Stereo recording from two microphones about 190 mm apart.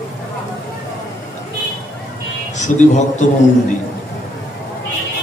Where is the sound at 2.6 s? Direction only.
40° left (ahead or behind).